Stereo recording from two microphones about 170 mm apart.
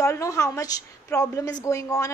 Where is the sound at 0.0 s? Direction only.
20° left (ahead or behind).